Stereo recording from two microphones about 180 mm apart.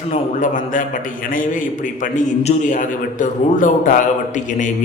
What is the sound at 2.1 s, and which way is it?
A man's voice, 40° left (ahead or behind).